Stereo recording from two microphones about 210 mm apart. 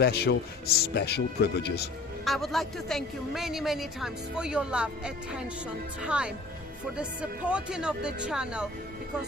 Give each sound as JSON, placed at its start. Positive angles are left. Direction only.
{"t": 0.0, "sound": "speech", "side_deg": 50}
{"t": 2.2, "sound": "a woman's voice", "side_deg": 0}